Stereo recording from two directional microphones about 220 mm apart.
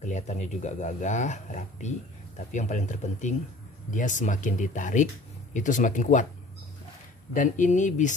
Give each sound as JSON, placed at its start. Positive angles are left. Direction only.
{"t": 0.0, "sound": "speech", "side_deg": 35}
{"t": 7.3, "sound": "speech", "side_deg": 35}